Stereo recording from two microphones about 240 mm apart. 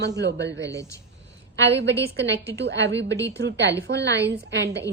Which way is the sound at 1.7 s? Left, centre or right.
Right.